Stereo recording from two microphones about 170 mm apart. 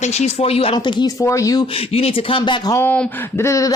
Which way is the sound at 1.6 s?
35° left (ahead or behind).